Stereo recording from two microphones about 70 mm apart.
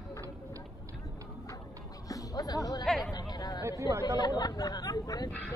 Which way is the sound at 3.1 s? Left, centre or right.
Left.